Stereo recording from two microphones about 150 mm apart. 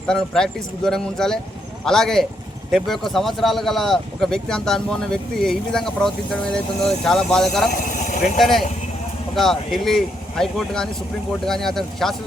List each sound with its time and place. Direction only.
0.1 s speech: 5° left (ahead or behind)
7.7 s a sound: 60° left (ahead or behind)
8.2 s speech: centre (ahead or behind)